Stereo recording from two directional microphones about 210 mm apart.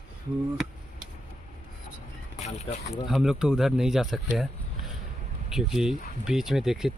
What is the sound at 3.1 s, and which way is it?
Speech, centre (ahead or behind).